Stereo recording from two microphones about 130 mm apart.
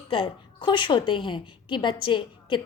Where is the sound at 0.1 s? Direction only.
40° left (ahead or behind).